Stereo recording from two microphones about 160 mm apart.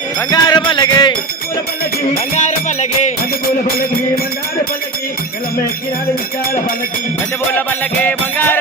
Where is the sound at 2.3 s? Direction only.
50° left (ahead or behind).